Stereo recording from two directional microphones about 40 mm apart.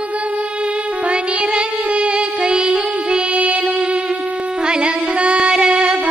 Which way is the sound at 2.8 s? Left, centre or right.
Right.